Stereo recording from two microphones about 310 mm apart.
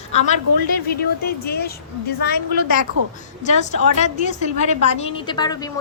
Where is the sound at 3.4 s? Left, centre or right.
Left.